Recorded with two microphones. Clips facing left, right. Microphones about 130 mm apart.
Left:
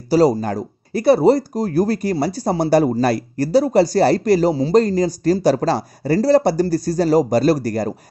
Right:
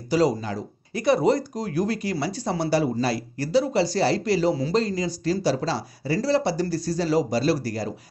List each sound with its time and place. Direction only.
0.1 s speech: 35° left (ahead or behind)
0.4 s speech: 50° left (ahead or behind)
0.9 s speech: 35° left (ahead or behind)